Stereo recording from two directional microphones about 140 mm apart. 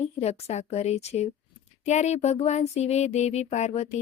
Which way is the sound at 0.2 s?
50° left (ahead or behind).